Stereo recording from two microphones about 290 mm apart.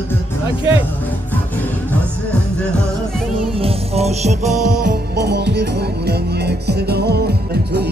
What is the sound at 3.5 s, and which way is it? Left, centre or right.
Music, right.